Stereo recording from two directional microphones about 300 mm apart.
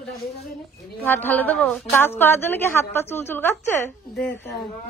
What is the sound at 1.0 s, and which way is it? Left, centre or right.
A woman's voice, centre.